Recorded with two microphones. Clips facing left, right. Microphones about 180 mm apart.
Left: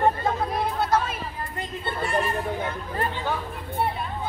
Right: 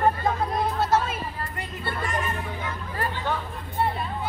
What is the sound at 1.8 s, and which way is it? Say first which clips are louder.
Speech: left 3 dB; 25° left (ahead or behind).